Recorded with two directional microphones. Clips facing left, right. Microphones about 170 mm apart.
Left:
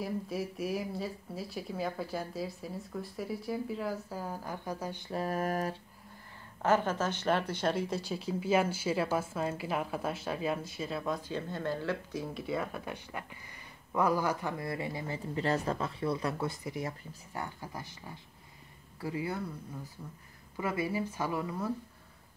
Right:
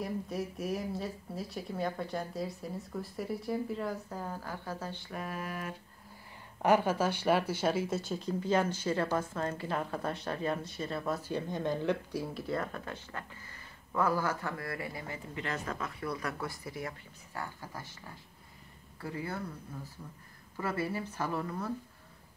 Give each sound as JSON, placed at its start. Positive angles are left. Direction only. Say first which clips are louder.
{"t": 0.0, "sound": "speech", "louder": "left 1 dB", "side_deg": 0}
{"t": 5.1, "sound": "a sound", "louder": "left 9 dB", "side_deg": 40}
{"t": 6.6, "sound": "speech", "louder": "right 2 dB", "side_deg": -10}
{"t": 11.1, "sound": "speech", "louder": "right 2 dB", "side_deg": -10}
{"t": 12.4, "sound": "speech", "louder": "left 1 dB", "side_deg": 5}
{"t": 20.5, "sound": "speech", "louder": "left 2 dB", "side_deg": 10}